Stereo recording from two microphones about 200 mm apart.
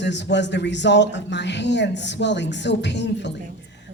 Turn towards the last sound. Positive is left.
turn(degrees=60)  # may be behind; listen again after turning